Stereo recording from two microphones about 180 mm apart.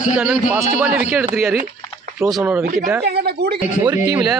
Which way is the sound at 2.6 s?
50° right (ahead or behind).